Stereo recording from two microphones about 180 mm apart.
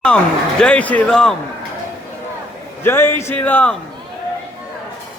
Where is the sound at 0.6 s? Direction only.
5° left (ahead or behind).